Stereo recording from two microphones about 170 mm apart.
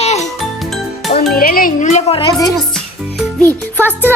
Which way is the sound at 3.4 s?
10° left (ahead or behind).